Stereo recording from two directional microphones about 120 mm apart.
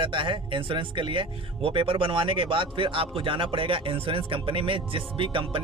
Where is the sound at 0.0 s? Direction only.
40° right (ahead or behind).